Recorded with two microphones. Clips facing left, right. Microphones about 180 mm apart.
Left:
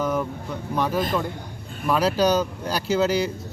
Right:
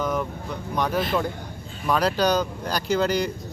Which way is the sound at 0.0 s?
10° left (ahead or behind).